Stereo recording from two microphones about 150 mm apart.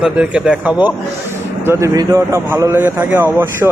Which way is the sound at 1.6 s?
15° right (ahead or behind).